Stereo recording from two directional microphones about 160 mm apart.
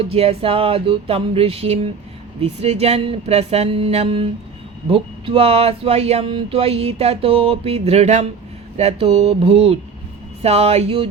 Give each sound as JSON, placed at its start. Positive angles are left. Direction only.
{"t": 0.0, "sound": "speech", "side_deg": -40}